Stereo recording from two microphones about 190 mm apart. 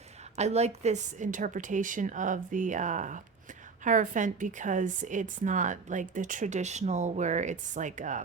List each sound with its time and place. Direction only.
0.3 s a woman's voice: 35° right (ahead or behind)